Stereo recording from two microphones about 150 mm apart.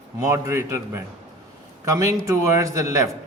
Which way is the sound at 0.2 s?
20° right (ahead or behind).